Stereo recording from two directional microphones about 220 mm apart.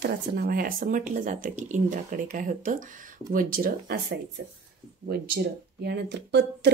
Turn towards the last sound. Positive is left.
turn(degrees=-50)  # may be behind; listen again after turning